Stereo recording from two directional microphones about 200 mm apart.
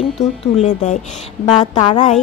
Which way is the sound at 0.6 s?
35° left (ahead or behind).